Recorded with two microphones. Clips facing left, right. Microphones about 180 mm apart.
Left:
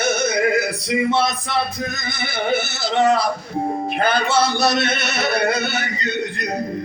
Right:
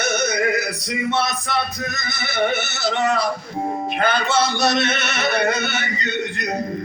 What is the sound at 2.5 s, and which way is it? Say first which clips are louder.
Music: left 2 dB; 30° left (ahead or behind).